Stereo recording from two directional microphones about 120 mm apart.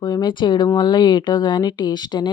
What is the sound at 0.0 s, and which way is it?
Speech, 35° left (ahead or behind).